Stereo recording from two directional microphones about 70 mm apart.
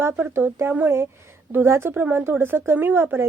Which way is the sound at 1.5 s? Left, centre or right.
Right.